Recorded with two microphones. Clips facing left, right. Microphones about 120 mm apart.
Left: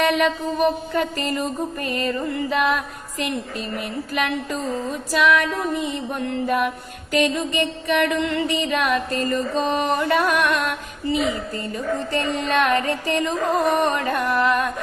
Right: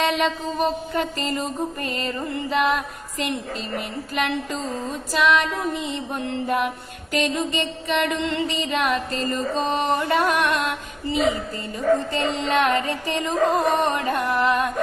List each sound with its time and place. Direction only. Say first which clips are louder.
0.0 s music: left 2 dB; 20° right (ahead or behind)